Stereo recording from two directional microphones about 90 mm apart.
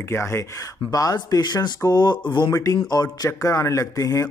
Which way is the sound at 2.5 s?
40° left (ahead or behind).